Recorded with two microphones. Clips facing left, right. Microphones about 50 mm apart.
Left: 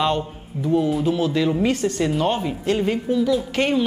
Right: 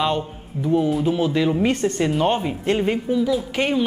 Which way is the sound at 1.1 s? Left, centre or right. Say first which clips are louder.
Right 1 dB; centre.